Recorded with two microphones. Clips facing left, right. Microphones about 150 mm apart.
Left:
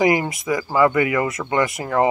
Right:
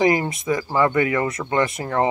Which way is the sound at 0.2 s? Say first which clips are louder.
Even; 25° right (ahead or behind).